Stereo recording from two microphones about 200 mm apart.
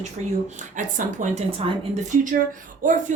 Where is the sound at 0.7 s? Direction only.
40° right (ahead or behind).